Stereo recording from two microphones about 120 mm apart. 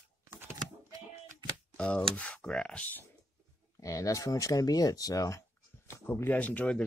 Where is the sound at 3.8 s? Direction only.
30° left (ahead or behind).